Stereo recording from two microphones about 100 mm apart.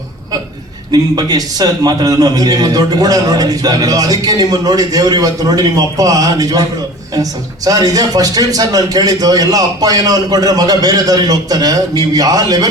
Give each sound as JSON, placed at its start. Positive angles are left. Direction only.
{"t": 0.9, "sound": "a man's voice", "side_deg": -40}